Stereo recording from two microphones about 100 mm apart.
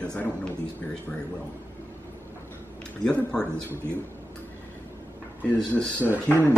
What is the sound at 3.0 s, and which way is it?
Speech, 10° left (ahead or behind).